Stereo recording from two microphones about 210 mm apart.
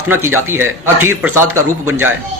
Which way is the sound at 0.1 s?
10° right (ahead or behind).